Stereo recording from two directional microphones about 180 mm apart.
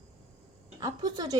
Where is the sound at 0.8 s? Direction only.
20° right (ahead or behind).